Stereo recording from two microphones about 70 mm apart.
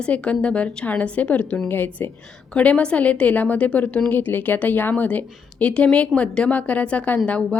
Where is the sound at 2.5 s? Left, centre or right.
Centre.